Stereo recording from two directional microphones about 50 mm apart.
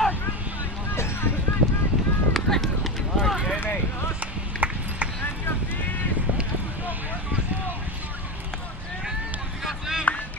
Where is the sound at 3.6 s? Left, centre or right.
Left.